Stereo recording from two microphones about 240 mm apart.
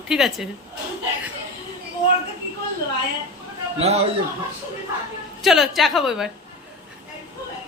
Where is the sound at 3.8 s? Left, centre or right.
Right.